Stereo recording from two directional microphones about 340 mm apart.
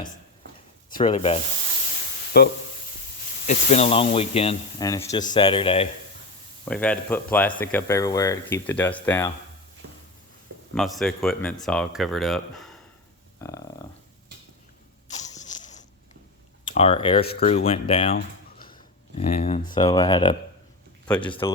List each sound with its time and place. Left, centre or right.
0.9 s speech: centre
2.3 s speech: left
6.7 s speech: centre
10.8 s speech: centre
13.4 s a sound: centre
15.2 s a sound: left
16.6 s speech: centre